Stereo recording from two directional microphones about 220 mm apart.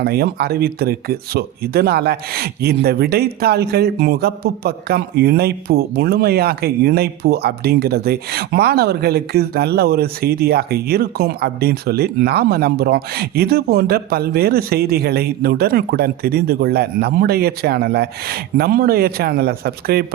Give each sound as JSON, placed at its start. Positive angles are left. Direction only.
{"t": 0.0, "sound": "speech", "side_deg": -45}